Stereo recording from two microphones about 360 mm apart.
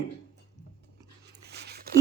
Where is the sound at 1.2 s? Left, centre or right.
Right.